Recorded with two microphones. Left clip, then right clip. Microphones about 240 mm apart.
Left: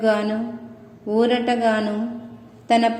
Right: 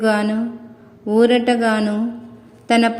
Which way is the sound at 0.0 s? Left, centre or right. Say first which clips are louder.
Right 2 dB; right.